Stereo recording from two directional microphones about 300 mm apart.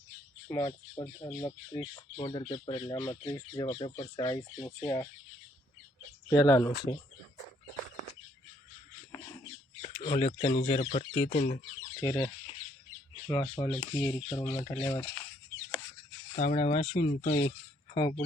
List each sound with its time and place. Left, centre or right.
0.4 s speech: centre
6.3 s speech: centre
9.8 s speech: centre
12.0 s speech: centre
16.3 s speech: left